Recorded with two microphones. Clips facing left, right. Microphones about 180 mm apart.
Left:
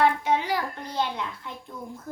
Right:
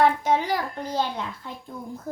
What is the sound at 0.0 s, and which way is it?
A woman's voice, 40° right (ahead or behind).